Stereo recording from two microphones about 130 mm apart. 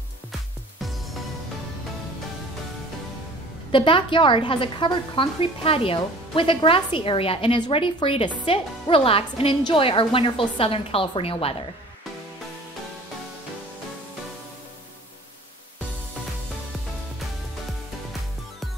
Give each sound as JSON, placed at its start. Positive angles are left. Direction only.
{"t": 3.7, "sound": "a woman's voice", "side_deg": 40}